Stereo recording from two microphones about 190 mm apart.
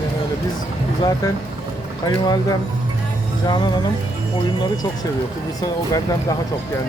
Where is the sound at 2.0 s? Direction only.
20° left (ahead or behind).